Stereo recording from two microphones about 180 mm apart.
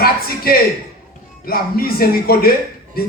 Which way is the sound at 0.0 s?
55° left (ahead or behind).